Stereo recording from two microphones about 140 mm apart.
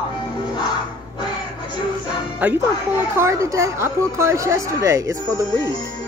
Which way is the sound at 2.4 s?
10° right (ahead or behind).